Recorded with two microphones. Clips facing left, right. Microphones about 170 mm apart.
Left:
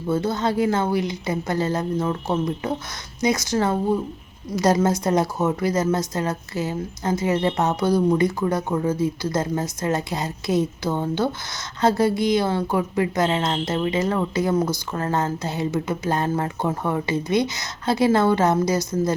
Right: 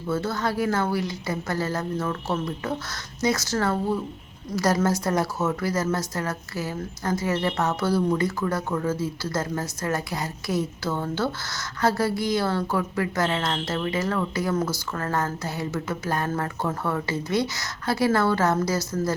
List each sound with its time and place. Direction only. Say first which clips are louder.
0.1 s a woman's voice: left 4 dB; 20° left (ahead or behind)